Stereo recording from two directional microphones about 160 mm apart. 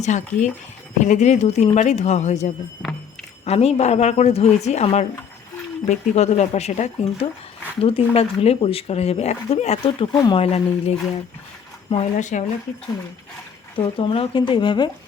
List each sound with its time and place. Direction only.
0.0 s speech: 50° left (ahead or behind)
13.7 s speech: 30° left (ahead or behind)